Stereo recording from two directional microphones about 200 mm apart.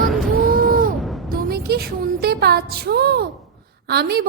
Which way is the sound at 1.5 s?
50° right (ahead or behind).